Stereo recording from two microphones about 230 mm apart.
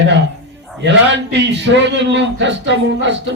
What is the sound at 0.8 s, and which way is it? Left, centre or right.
A man's voice, right.